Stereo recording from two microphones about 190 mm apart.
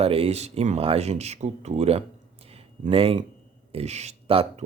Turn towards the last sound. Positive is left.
turn(degrees=-30)  # may be behind; listen again after turning